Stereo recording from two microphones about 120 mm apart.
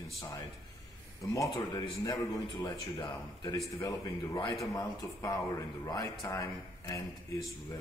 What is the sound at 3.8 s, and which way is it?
A man's voice, 30° left (ahead or behind).